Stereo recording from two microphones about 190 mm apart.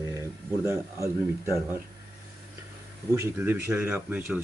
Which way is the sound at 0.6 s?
15° right (ahead or behind).